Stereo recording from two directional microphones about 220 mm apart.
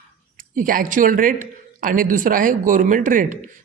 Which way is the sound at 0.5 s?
40° right (ahead or behind).